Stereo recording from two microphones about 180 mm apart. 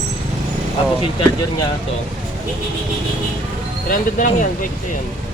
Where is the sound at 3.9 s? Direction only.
50° left (ahead or behind).